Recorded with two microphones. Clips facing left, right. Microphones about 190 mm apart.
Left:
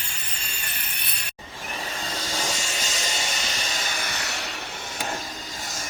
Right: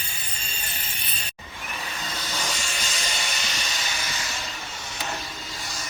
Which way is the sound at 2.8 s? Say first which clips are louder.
Left 2 dB; 45° left (ahead or behind).